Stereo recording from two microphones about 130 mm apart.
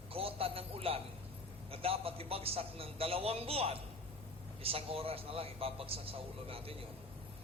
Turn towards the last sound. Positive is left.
turn(degrees=-45)  # may be behind; listen again after turning